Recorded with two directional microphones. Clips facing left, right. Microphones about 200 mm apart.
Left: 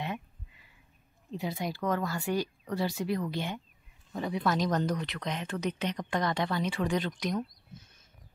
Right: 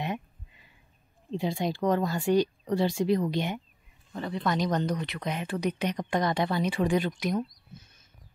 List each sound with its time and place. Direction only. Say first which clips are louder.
0.0 s a sound: right 3 dB; 20° right (ahead or behind)
1.3 s speech: right 5 dB; 25° right (ahead or behind)
4.1 s speech: even; 10° left (ahead or behind); by 7.3 s 10° right (ahead or behind)